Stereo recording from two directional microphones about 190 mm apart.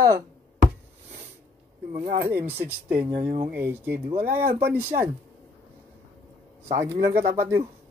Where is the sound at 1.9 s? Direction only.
40° right (ahead or behind).